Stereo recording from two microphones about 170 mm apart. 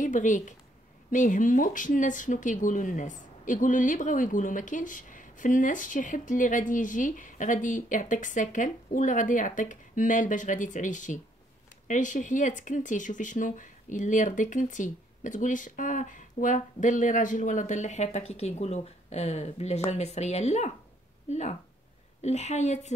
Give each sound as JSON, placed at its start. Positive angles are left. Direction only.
{"t": 0.0, "sound": "a woman's voice", "side_deg": 50}